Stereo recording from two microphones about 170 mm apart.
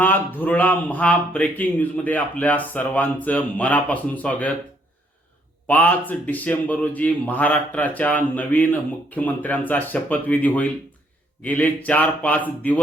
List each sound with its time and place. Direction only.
0.0 s speech: 10° left (ahead or behind)
5.6 s speech: 10° left (ahead or behind)